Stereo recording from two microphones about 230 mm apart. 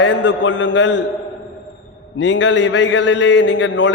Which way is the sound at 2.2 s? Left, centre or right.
Left.